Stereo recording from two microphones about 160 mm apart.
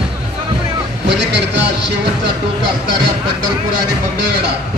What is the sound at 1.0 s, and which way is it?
Boat, 90° right.